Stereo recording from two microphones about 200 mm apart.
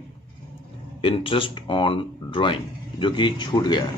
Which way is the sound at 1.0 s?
25° left (ahead or behind).